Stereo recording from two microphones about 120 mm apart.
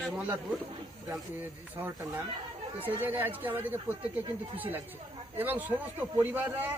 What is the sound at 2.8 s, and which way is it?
A man's voice, 15° right (ahead or behind).